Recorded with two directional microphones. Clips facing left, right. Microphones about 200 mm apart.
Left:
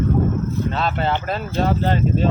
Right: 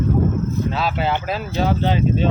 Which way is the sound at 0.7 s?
5° right (ahead or behind).